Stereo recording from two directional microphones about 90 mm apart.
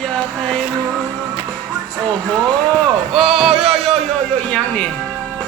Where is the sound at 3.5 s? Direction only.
90° right.